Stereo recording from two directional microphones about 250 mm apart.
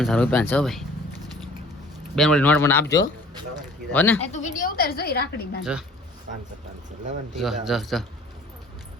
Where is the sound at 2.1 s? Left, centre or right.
Centre.